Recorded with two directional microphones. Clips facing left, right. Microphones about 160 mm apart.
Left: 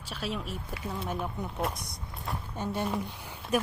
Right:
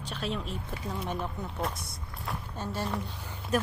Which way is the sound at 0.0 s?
5° left (ahead or behind).